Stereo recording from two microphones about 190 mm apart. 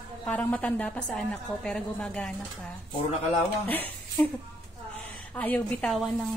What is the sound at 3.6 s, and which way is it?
Speech, 10° left (ahead or behind).